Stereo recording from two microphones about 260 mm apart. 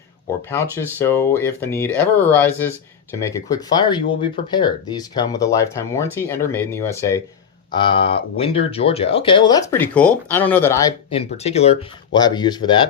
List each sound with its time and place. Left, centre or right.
0.5 s speech: centre
11.1 s speech: left